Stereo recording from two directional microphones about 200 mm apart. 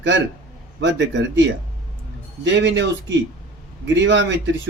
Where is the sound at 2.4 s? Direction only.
65° right (ahead or behind).